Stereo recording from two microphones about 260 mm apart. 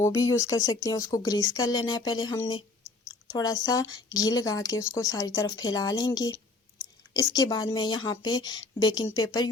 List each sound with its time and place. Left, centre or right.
0.0 s a woman's voice: centre